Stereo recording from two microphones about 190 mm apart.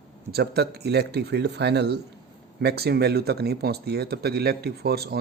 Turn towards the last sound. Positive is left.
turn(degrees=-55)  # may be behind; listen again after turning